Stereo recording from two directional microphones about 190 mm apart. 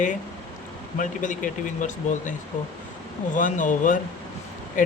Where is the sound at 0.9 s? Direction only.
45° left (ahead or behind).